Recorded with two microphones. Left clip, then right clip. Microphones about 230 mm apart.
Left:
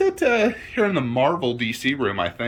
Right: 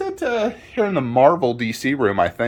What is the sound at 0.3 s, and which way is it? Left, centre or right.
Speech, centre.